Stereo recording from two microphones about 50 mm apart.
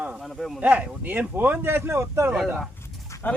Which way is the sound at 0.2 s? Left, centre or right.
Centre.